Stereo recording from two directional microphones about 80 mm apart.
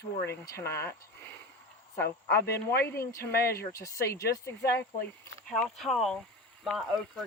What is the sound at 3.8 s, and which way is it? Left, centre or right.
Speech, left.